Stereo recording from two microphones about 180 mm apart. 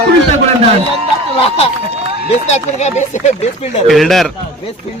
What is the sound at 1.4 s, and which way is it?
Speech, 35° left (ahead or behind).